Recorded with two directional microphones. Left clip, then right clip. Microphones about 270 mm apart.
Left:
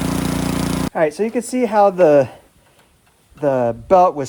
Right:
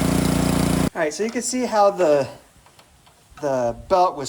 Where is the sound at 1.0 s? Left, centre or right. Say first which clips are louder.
Left 5 dB; centre.